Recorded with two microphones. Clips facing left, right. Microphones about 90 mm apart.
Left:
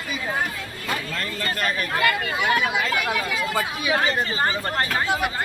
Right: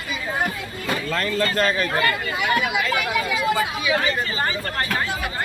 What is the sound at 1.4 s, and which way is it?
Speech, 30° right (ahead or behind).